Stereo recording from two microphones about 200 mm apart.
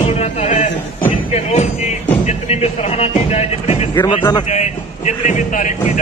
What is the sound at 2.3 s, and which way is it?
Speech, 30° left (ahead or behind).